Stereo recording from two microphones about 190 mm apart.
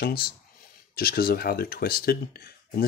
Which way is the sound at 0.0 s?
50° left (ahead or behind).